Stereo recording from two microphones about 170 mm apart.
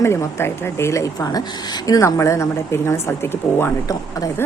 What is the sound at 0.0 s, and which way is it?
A woman's voice, 15° left (ahead or behind).